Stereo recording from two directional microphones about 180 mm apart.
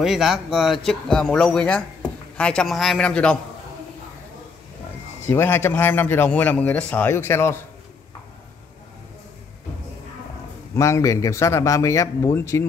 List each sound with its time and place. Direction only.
0.0 s speech: centre (ahead or behind)
5.3 s speech: 15° left (ahead or behind)
10.8 s speech: 15° left (ahead or behind)